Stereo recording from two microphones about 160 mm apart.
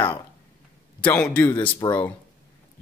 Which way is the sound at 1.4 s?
25° left (ahead or behind).